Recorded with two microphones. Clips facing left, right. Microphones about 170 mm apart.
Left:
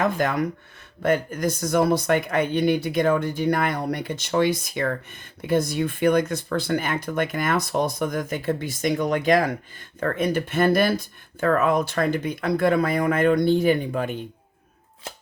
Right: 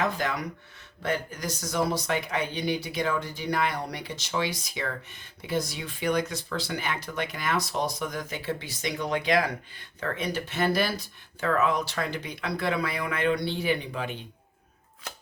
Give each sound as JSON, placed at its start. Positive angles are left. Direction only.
{"t": 0.0, "sound": "speech", "side_deg": 50}